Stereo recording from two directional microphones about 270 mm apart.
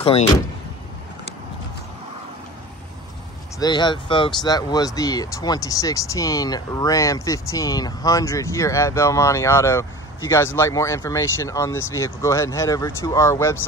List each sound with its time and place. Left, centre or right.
3.5 s speech: centre